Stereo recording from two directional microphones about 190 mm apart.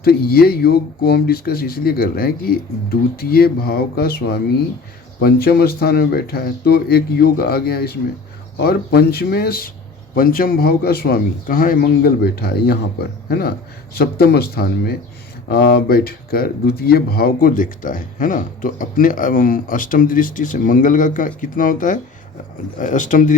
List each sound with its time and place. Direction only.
0.0 s speech: 55° left (ahead or behind)